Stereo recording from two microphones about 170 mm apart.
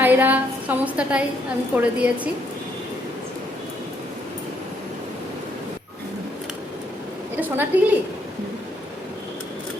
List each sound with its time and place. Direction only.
0.0 s a woman's voice: 10° right (ahead or behind)
7.4 s a woman's voice: 10° right (ahead or behind)